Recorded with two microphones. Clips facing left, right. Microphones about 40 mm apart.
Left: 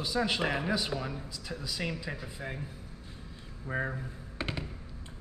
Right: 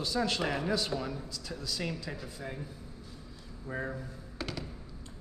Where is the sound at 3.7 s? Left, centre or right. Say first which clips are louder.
Left 3 dB; left.